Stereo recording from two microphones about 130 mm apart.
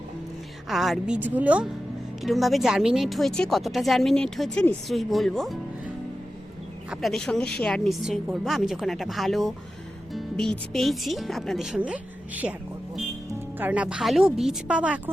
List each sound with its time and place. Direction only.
0.7 s a woman's voice: centre (ahead or behind)
6.9 s a woman's voice: centre (ahead or behind)
13.6 s speech: 10° right (ahead or behind)